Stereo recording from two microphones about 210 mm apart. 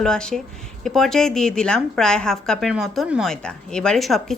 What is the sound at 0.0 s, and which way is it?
Speech, 5° left (ahead or behind).